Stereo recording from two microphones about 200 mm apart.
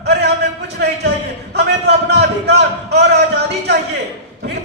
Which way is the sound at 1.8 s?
55° right (ahead or behind).